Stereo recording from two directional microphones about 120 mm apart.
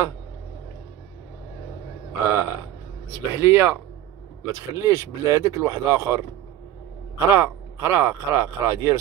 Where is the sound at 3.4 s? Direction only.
20° right (ahead or behind).